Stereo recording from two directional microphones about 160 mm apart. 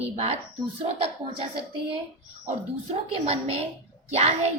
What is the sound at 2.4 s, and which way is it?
A woman's voice, 40° right (ahead or behind).